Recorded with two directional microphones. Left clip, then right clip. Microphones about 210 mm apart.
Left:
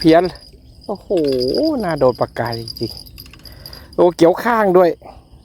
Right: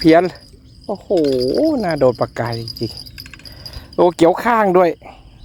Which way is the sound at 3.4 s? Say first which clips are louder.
Right 2 dB; centre (ahead or behind).